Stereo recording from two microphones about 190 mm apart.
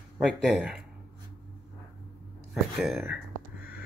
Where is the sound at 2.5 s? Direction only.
Centre (ahead or behind).